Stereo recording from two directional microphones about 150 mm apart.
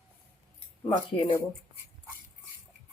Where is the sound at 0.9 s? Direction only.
30° left (ahead or behind).